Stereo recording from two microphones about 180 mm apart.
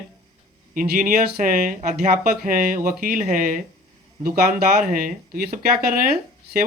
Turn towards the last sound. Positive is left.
turn(degrees=-55)  # may be behind; listen again after turning